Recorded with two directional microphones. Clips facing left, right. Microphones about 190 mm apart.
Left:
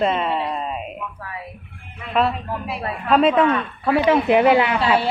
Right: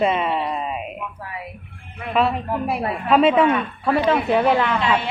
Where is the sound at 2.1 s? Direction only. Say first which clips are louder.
Right 1 dB; centre (ahead or behind).